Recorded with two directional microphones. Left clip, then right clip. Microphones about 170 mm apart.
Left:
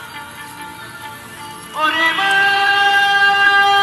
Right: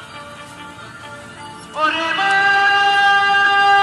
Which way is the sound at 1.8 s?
10° right (ahead or behind).